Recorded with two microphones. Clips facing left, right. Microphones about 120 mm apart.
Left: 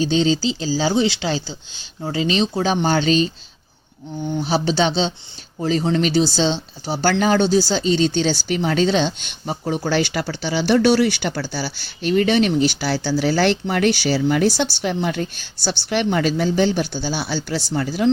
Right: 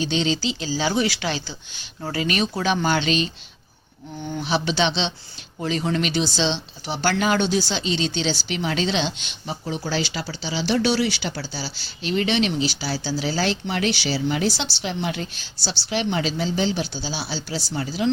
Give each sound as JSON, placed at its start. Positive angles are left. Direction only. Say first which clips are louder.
{"t": 0.0, "sound": "speech", "louder": "left 5 dB", "side_deg": 35}
{"t": 4.4, "sound": "speech", "louder": "left 3 dB", "side_deg": 35}